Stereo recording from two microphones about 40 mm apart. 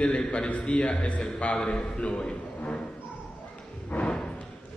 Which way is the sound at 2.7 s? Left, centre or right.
Left.